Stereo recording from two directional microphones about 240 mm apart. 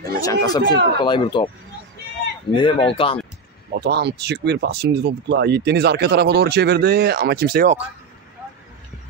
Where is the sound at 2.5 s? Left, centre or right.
Left.